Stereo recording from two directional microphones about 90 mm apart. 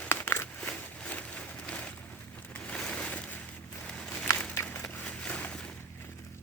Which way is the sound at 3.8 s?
10° left (ahead or behind).